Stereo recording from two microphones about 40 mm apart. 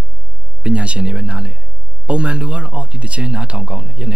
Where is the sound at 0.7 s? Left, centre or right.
Right.